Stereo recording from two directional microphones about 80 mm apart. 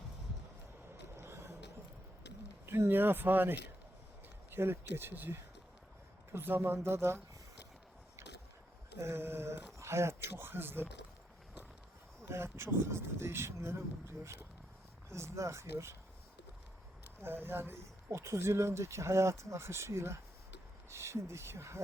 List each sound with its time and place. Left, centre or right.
1.2 s a sound: right
2.6 s speech: right
9.0 s a sound: right
9.7 s speech: right
12.2 s speech: right
15.1 s speech: right
17.2 s speech: right